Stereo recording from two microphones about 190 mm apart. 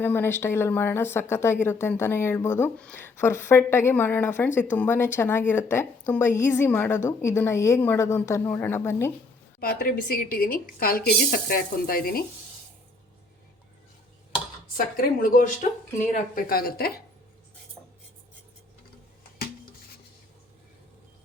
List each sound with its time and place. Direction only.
0.0 s a woman's voice: 10° left (ahead or behind)
9.6 s a woman's voice: 50° left (ahead or behind)
14.9 s a woman's voice: 50° left (ahead or behind)